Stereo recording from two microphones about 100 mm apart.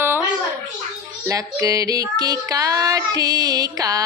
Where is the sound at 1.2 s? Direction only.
35° right (ahead or behind).